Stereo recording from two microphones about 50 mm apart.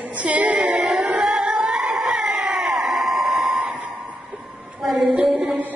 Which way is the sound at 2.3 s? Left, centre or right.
Centre.